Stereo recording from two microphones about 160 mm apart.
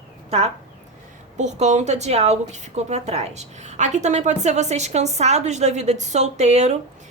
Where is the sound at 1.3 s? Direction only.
45° right (ahead or behind).